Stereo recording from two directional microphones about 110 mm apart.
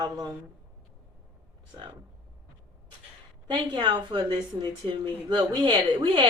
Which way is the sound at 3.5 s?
45° right (ahead or behind).